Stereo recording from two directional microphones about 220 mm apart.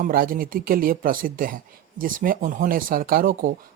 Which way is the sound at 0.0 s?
40° right (ahead or behind).